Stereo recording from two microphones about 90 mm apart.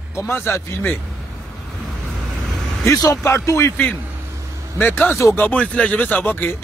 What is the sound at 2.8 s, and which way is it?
A man's voice, 35° left (ahead or behind).